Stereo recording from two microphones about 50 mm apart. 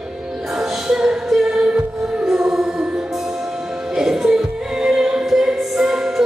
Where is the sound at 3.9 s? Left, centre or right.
Centre.